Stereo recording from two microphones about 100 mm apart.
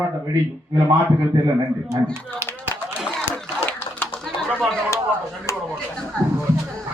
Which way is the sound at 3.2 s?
20° left (ahead or behind).